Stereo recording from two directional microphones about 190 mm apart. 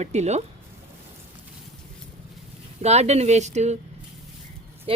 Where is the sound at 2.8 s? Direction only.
35° right (ahead or behind).